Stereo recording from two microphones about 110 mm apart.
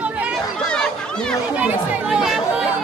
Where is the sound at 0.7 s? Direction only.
5° left (ahead or behind).